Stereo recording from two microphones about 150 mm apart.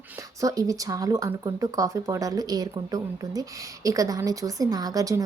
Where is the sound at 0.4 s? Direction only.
20° right (ahead or behind).